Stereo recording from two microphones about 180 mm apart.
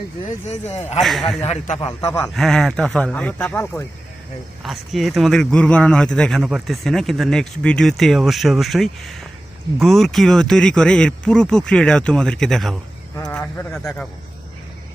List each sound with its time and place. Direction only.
0.3 s speech: 40° left (ahead or behind)
1.0 s speech: centre (ahead or behind)
1.4 s speech: 40° left (ahead or behind)
2.0 s speech: 15° left (ahead or behind)
2.3 s speech: centre (ahead or behind)
4.6 s speech: centre (ahead or behind)
13.1 s speech: 10° left (ahead or behind)